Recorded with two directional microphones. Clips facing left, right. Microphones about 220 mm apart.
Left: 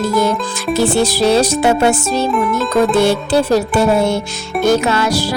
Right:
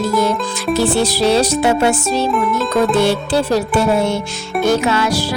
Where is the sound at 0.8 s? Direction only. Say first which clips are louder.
Left 2 dB; 45° left (ahead or behind).